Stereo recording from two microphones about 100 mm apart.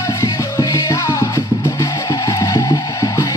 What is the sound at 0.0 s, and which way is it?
Music, 35° left (ahead or behind).